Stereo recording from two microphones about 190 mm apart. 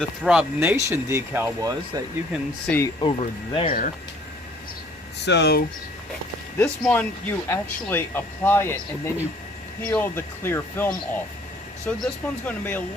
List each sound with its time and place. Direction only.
0.0 s speech: 5° right (ahead or behind)
2.6 s speech: 10° left (ahead or behind)
3.0 s speech: 25° left (ahead or behind)
5.2 s speech: 60° left (ahead or behind)
6.6 s speech: 5° left (ahead or behind)